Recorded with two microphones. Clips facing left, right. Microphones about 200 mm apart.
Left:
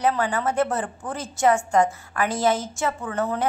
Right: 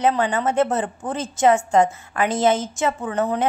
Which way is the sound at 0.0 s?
20° right (ahead or behind).